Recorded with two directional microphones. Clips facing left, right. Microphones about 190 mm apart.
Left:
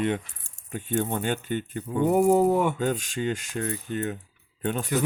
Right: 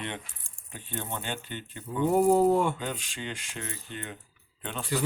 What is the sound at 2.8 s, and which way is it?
Speech, 45° left (ahead or behind).